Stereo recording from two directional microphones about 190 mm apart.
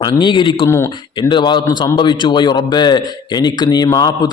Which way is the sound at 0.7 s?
15° left (ahead or behind).